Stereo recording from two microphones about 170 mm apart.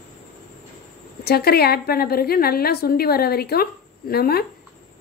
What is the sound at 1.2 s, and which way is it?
A woman's voice, 65° left (ahead or behind).